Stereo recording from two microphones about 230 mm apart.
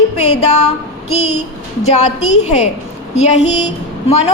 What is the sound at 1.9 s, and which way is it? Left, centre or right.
Female singing, left.